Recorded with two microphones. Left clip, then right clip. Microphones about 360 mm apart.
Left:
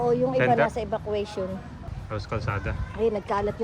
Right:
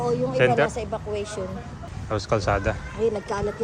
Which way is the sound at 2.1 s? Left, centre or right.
Centre.